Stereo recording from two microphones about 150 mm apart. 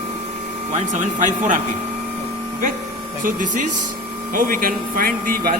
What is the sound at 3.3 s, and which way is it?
Speech, 60° right (ahead or behind).